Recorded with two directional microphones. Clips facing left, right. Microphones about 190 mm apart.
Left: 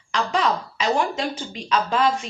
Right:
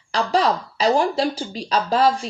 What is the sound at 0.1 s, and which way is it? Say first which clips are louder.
A woman's voice: right 3 dB; 35° right (ahead or behind).